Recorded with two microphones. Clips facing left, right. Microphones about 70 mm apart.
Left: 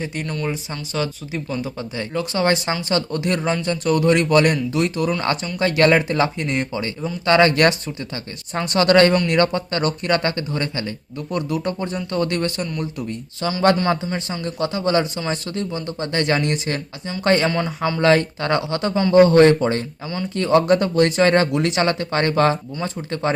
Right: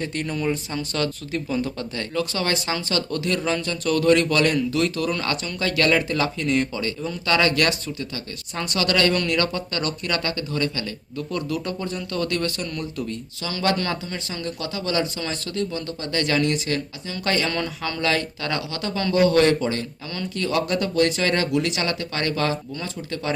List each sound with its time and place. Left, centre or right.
0.0 s speech: centre
2.1 s speech: left
3.4 s speech: centre
3.7 s speech: left
5.2 s speech: left
13.7 s speech: left